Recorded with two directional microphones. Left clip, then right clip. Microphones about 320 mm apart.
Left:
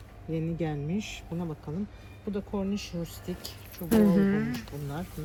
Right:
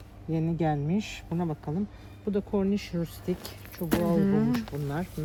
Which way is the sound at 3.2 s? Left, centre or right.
Right.